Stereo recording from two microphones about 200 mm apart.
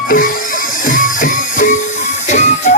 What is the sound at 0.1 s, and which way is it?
Music, 45° left (ahead or behind).